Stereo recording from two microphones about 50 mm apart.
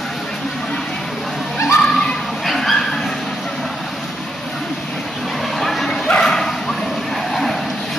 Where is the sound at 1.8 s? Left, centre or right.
Centre.